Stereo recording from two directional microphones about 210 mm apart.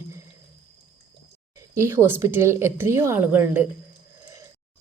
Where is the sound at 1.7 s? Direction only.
10° right (ahead or behind).